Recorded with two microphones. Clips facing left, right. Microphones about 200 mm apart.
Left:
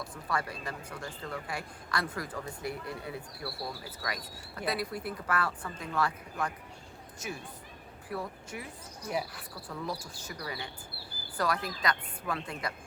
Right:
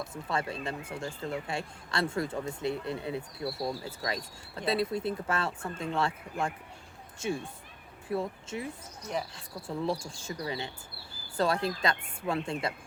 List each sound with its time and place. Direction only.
0.0 s speech: 25° right (ahead or behind)